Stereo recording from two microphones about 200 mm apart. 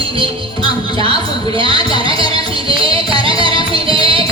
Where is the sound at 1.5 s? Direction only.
25° right (ahead or behind).